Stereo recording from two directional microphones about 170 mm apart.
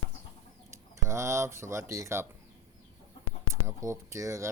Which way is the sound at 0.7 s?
15° right (ahead or behind).